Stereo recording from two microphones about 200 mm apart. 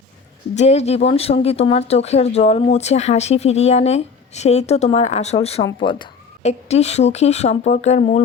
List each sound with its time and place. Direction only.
0.5 s speech: 35° left (ahead or behind)